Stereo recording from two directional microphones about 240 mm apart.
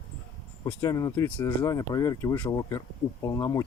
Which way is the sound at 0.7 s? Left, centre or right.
Centre.